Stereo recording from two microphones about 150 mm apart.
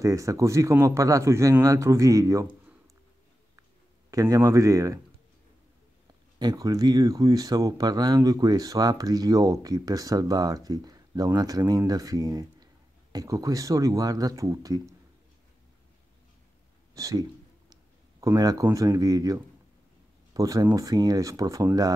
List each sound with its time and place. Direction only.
0.0 s speech: 20° right (ahead or behind)
4.1 s speech: 20° right (ahead or behind)
6.4 s speech: 25° right (ahead or behind)
16.9 s a sound: 25° right (ahead or behind)
18.2 s speech: 25° right (ahead or behind)